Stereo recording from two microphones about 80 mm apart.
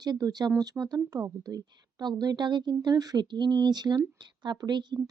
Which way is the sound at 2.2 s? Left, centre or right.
Right.